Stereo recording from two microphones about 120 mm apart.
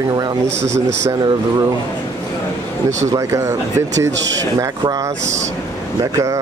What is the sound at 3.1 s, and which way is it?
Speech, 25° right (ahead or behind).